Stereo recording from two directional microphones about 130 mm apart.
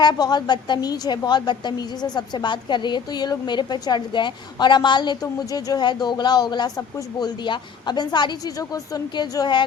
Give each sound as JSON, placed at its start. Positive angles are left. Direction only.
{"t": 0.0, "sound": "a woman's voice", "side_deg": 30}